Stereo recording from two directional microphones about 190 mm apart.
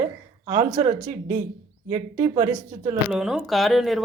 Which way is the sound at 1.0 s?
40° right (ahead or behind).